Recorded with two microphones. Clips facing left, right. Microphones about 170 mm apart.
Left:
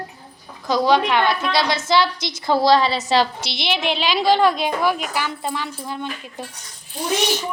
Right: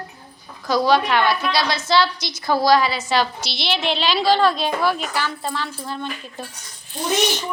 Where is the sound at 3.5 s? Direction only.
15° left (ahead or behind).